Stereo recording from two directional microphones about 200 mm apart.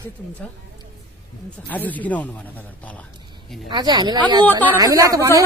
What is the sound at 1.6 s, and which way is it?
Speech, 10° left (ahead or behind).